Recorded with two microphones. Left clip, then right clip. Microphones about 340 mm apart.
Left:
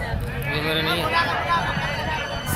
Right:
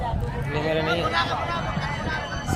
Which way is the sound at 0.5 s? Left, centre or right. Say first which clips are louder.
Left 1 dB; right.